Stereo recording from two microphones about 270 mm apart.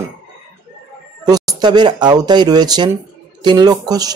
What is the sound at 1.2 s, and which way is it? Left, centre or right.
Speech, centre.